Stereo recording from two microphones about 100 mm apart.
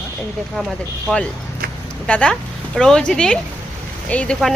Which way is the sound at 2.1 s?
15° left (ahead or behind).